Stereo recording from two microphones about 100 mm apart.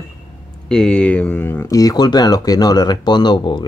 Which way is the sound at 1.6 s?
40° left (ahead or behind).